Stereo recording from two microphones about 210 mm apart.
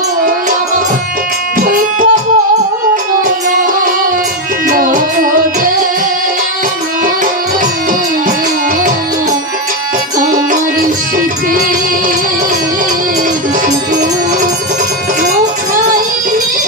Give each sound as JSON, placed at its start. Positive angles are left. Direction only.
{"t": 1.6, "sound": "music", "side_deg": -40}
{"t": 4.6, "sound": "music", "side_deg": -40}
{"t": 10.1, "sound": "music", "side_deg": -40}